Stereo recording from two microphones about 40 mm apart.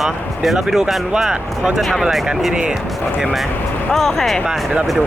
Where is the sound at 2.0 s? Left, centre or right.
Centre.